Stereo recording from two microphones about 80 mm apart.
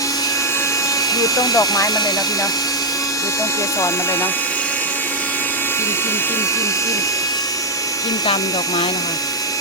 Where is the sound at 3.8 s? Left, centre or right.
Left.